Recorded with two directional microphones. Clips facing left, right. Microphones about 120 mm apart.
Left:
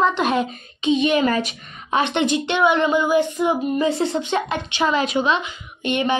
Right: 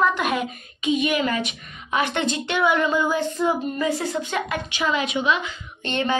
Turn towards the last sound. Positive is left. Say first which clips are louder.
# left 3 dB
turn(degrees=15)  # may be behind; listen again after turning